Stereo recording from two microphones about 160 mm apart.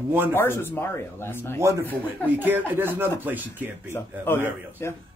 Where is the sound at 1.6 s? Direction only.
15° right (ahead or behind).